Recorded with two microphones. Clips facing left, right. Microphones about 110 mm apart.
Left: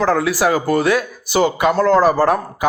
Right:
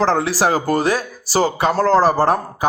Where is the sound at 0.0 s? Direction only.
30° right (ahead or behind).